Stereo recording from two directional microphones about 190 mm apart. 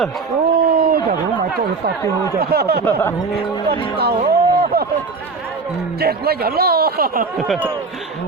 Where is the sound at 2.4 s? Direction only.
55° right (ahead or behind).